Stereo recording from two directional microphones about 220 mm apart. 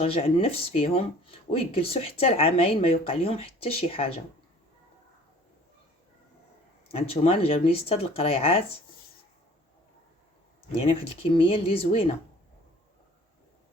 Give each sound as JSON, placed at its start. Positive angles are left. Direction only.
{"t": 0.0, "sound": "speech", "side_deg": 25}
{"t": 6.8, "sound": "speech", "side_deg": 25}
{"t": 11.3, "sound": "speech", "side_deg": 25}